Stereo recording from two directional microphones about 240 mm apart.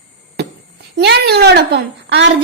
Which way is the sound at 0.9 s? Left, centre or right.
Right.